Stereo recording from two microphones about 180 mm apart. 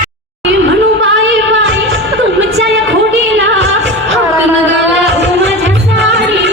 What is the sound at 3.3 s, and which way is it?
Music, 90° right.